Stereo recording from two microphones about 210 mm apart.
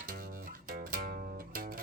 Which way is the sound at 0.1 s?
40° right (ahead or behind).